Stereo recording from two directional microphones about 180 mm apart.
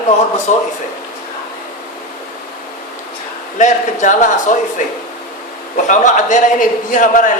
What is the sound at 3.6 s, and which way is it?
Speech, 45° left (ahead or behind).